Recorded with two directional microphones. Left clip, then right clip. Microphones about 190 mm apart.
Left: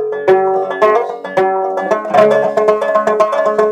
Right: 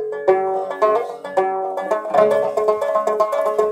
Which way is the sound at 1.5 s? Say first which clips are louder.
Left 6 dB; 25° left (ahead or behind).